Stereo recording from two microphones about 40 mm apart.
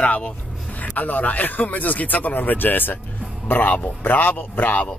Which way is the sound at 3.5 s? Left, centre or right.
Left.